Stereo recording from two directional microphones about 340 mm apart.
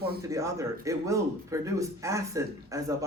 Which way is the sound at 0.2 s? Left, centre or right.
Centre.